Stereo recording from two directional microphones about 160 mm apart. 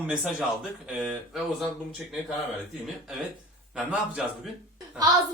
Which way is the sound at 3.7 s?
5° right (ahead or behind).